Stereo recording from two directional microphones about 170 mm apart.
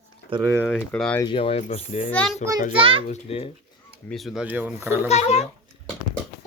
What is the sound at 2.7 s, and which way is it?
Speech, 30° right (ahead or behind).